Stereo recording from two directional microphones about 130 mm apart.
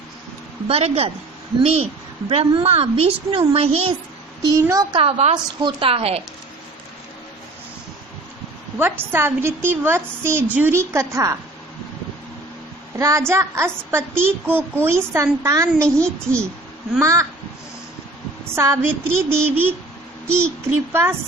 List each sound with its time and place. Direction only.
0.7 s a woman's voice: 50° right (ahead or behind)
4.5 s a woman's voice: 25° right (ahead or behind)
4.9 s a woman's voice: 50° right (ahead or behind)
5.6 s a woman's voice: 45° right (ahead or behind)
8.8 s a woman's voice: 15° right (ahead or behind)
13.0 s a woman's voice: 25° right (ahead or behind)
16.0 s a child's voice: 10° left (ahead or behind)
17.0 s a woman's voice: 25° right (ahead or behind)
18.5 s a sound: 20° right (ahead or behind)
20.4 s a woman's voice: 20° right (ahead or behind)